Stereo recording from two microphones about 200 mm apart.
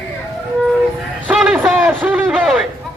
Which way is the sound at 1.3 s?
5° right (ahead or behind).